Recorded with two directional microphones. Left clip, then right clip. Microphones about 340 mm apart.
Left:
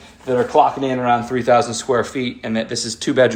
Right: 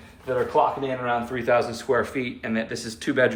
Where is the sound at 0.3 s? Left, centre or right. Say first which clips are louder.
Left 7 dB; centre.